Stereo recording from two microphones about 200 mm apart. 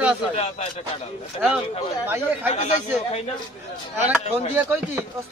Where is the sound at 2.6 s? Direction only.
35° left (ahead or behind).